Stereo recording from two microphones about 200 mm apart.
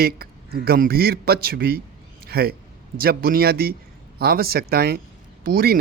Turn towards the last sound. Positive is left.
turn(degrees=-50)  # may be behind; listen again after turning